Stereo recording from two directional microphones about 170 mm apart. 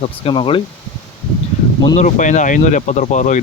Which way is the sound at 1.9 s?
45° left (ahead or behind).